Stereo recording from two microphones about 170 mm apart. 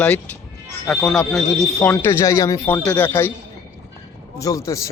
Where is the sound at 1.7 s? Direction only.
15° left (ahead or behind).